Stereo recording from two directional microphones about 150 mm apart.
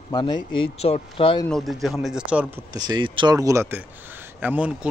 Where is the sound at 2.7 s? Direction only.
25° right (ahead or behind); by 4.9 s 10° right (ahead or behind).